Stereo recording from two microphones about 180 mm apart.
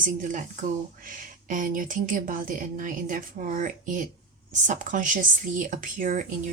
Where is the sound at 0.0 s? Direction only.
45° right (ahead or behind).